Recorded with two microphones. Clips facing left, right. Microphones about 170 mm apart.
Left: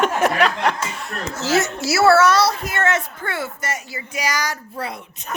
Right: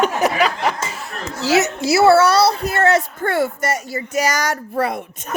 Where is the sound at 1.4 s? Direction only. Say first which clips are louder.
Right 3 dB; 20° right (ahead or behind).